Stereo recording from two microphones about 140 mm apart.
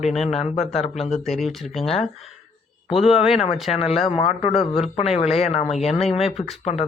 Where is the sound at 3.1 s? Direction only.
45° left (ahead or behind).